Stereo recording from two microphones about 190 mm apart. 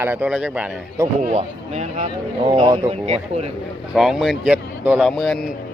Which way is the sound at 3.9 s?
Centre (ahead or behind).